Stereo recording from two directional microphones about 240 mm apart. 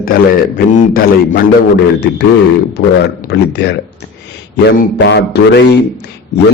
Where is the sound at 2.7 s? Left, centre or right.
Left.